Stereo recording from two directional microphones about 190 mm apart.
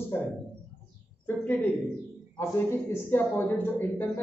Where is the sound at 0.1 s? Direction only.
10° left (ahead or behind).